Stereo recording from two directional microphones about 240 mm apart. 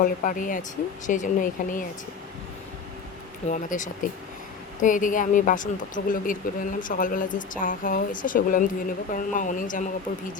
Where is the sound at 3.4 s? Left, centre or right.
Left.